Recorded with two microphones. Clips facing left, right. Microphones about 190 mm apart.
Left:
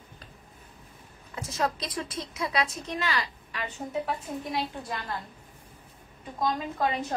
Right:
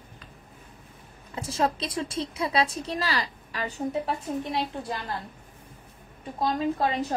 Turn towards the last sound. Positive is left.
turn(degrees=-30)  # may be behind; listen again after turning